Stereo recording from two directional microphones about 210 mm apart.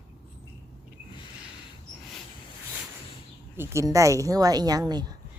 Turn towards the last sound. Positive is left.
turn(degrees=-20)  # may be behind; listen again after turning